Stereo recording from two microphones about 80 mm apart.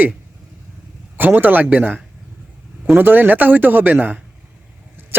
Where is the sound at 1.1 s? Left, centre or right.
Right.